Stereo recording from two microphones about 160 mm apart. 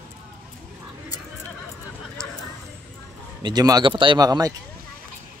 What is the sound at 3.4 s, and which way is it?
Speech, 25° right (ahead or behind).